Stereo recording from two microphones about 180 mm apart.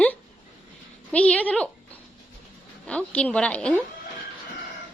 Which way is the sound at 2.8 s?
5° left (ahead or behind).